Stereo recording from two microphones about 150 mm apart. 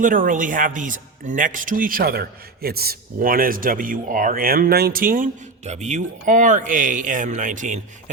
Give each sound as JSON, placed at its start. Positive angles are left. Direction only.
{"t": 0.0, "sound": "speech", "side_deg": -65}